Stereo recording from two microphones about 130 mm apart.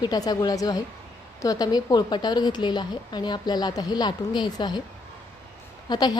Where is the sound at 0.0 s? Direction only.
30° left (ahead or behind).